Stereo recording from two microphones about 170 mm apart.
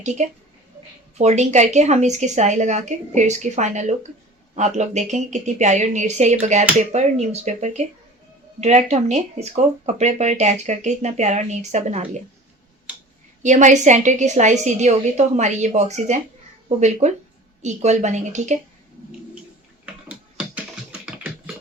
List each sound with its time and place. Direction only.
0.2 s speech: 45° right (ahead or behind)
13.4 s speech: 45° right (ahead or behind)
19.8 s a sound: 5° right (ahead or behind)